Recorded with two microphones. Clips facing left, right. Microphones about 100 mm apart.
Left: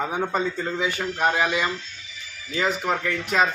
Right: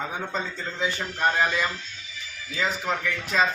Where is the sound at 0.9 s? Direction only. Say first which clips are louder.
Even; 10° left (ahead or behind).